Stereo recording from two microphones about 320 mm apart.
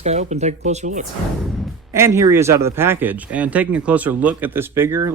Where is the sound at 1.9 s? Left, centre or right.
Centre.